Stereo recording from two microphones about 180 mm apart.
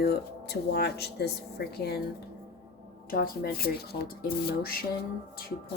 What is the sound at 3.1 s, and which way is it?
Speech, 55° left (ahead or behind).